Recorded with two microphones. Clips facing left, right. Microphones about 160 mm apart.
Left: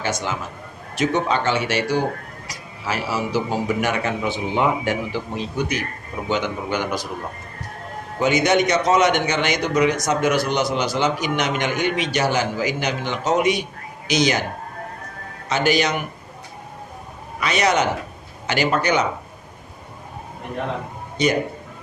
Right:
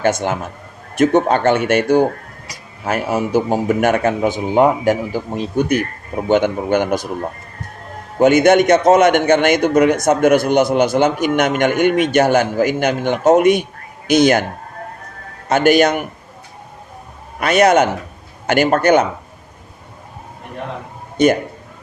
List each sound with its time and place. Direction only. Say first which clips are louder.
0.0 s a man's voice: right 8 dB; 55° right (ahead or behind)
8.2 s a man's voice: right 7 dB; 55° right (ahead or behind)
15.4 s a man's voice: right 7 dB; 50° right (ahead or behind)
17.4 s a man's voice: right 7 dB; 50° right (ahead or behind)
21.2 s a man's voice: right 7 dB; 50° right (ahead or behind)